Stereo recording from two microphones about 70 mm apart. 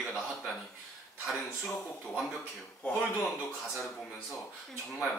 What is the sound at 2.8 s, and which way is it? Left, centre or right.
Speech, centre.